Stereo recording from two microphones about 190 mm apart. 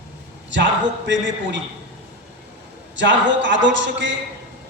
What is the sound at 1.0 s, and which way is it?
Speech, 70° right (ahead or behind).